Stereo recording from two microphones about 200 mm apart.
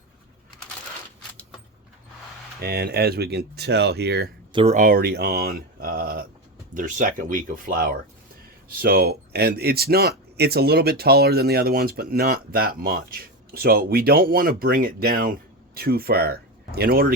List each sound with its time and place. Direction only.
2.6 s speech: 50° right (ahead or behind)
4.5 s speech: 35° right (ahead or behind); by 17.1 s 50° right (ahead or behind)